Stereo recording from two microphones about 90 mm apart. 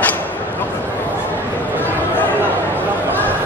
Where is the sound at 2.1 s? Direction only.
20° left (ahead or behind).